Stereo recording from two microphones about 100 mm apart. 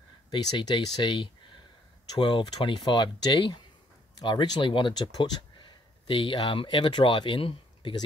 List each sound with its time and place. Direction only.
0.3 s speech: 45° left (ahead or behind)